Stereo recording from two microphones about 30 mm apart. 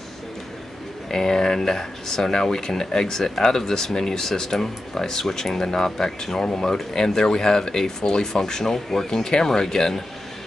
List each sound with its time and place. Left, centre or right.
1.1 s speech: centre